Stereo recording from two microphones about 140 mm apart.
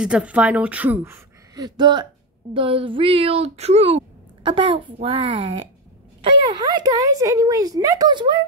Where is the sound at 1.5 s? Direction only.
30° right (ahead or behind).